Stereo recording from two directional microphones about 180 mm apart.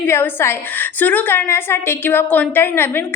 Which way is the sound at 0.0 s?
10° left (ahead or behind).